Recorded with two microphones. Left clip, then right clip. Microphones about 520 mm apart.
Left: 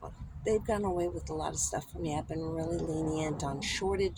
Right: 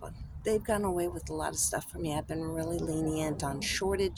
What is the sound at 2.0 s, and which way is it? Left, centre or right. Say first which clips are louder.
Speech: right 1 dB; right.